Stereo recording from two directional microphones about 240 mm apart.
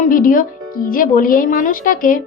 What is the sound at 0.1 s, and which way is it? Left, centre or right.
A woman's voice, left.